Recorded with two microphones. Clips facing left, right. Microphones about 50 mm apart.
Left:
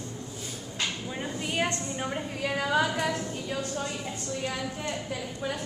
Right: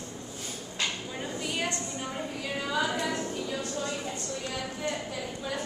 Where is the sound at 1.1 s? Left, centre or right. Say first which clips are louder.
Left 1 dB; centre.